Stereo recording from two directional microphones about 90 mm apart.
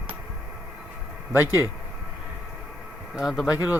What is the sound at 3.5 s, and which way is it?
Speech, 20° right (ahead or behind).